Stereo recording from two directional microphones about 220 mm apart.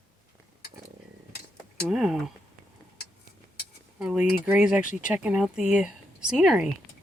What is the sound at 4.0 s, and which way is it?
Speech, 5° right (ahead or behind).